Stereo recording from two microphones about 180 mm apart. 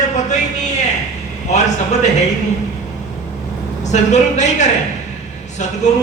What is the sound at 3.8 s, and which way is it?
A man's voice, 40° left (ahead or behind).